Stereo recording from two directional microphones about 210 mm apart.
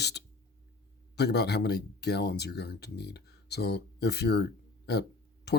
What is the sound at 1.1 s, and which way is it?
Speech, 50° left (ahead or behind).